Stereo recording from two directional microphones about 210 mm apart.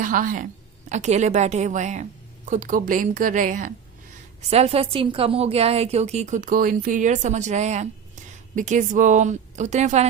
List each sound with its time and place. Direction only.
0.0 s a woman's voice: 40° right (ahead or behind)